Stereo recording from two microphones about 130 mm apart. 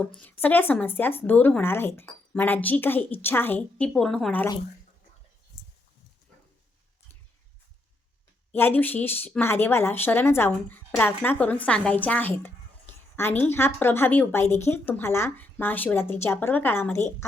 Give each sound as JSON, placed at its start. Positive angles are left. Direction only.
{"t": 0.2, "sound": "a woman's voice", "side_deg": 15}
{"t": 8.5, "sound": "a woman's voice", "side_deg": 15}